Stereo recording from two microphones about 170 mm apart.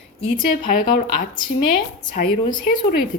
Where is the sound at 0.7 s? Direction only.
55° left (ahead or behind).